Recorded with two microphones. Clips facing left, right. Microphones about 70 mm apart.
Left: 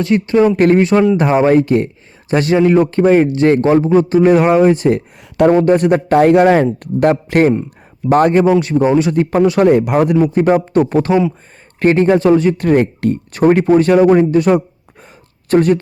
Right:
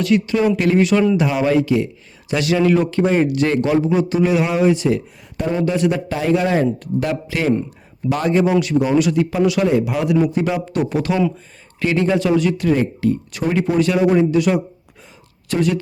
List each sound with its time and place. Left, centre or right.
0.0 s a man's voice: left
2.3 s a man's voice: left
8.5 s a man's voice: left
9.6 s a man's voice: left
12.6 s a man's voice: left